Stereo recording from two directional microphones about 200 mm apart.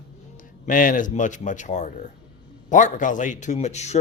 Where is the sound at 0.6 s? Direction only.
40° left (ahead or behind).